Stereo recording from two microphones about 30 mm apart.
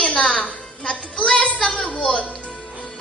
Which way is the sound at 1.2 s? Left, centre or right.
Left.